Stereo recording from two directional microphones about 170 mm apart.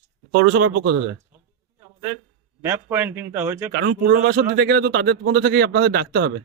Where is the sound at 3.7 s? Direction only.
90° right; by 6.3 s 75° right (ahead or behind).